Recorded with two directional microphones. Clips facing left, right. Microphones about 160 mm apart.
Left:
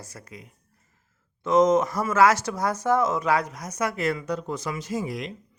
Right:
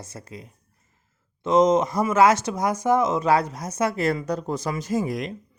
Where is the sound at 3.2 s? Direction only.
30° right (ahead or behind).